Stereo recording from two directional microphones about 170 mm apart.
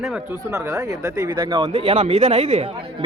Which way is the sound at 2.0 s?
45° right (ahead or behind).